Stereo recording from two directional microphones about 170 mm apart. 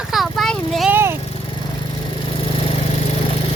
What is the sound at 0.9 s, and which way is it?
Vehicle, 15° right (ahead or behind).